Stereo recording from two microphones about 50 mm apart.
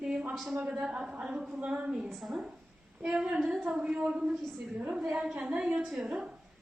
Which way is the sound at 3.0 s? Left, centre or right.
Right.